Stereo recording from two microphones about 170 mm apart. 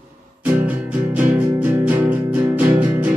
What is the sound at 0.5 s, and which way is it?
Music, 10° right (ahead or behind).